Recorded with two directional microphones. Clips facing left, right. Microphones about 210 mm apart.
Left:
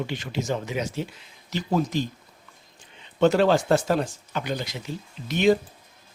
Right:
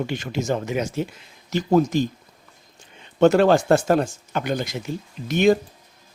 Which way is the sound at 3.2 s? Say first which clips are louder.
Right 4 dB; 50° right (ahead or behind).